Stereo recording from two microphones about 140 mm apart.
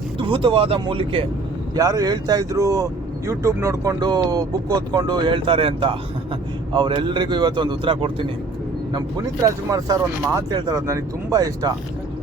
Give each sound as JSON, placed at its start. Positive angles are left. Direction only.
{"t": 0.2, "sound": "a man's voice", "side_deg": -40}
{"t": 1.7, "sound": "a man's voice", "side_deg": -25}
{"t": 8.9, "sound": "speech", "side_deg": -25}